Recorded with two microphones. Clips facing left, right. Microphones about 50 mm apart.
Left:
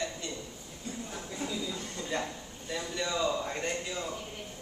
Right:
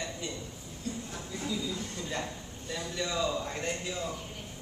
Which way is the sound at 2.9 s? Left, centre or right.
Centre.